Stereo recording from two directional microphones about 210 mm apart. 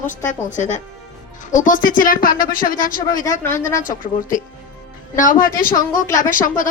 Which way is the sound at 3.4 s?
10° left (ahead or behind).